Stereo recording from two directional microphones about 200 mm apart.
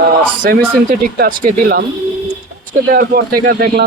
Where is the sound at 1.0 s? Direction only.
45° right (ahead or behind).